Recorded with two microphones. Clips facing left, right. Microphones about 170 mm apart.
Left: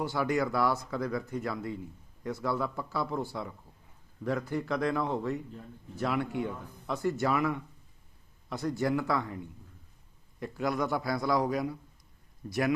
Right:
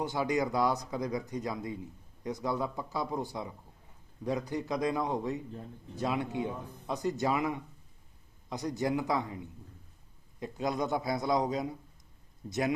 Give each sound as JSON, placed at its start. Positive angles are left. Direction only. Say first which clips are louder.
{"t": 0.0, "sound": "a man's voice", "louder": "left 1 dB", "side_deg": -20}
{"t": 10.4, "sound": "a man's voice", "louder": "left 1 dB", "side_deg": -20}